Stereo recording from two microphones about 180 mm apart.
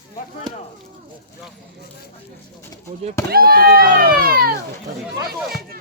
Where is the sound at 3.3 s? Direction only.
55° right (ahead or behind).